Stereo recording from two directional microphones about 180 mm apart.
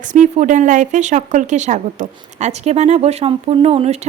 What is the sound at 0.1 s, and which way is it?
Speech, 45° right (ahead or behind).